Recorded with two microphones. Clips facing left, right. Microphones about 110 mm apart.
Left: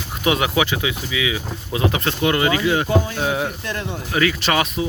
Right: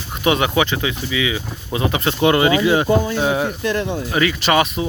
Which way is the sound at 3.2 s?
Centre (ahead or behind).